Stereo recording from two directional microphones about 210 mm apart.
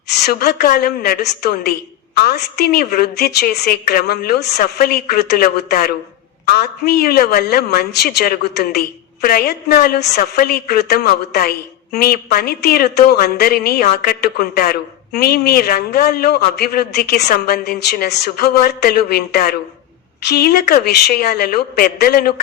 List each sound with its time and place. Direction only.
0.1 s speech: 50° left (ahead or behind)